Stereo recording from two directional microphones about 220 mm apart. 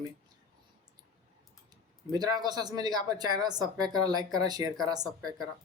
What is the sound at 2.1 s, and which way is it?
Speech, 20° right (ahead or behind).